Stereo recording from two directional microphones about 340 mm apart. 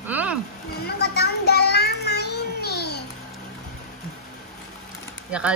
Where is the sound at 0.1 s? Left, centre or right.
Centre.